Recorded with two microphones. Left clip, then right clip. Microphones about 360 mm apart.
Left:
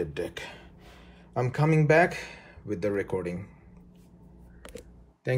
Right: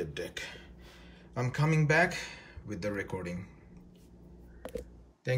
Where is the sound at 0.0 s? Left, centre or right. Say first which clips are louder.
Left 5 dB; centre.